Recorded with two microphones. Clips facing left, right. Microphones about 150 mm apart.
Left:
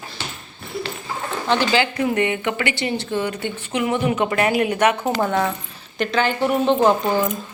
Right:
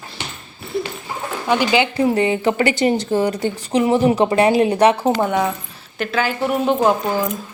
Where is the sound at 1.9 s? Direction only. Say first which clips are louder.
Right 4 dB; 30° right (ahead or behind).